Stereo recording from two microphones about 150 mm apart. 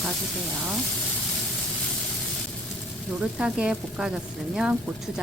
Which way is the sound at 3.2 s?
5° right (ahead or behind).